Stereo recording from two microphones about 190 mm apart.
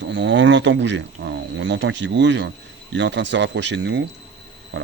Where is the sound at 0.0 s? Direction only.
70° right (ahead or behind).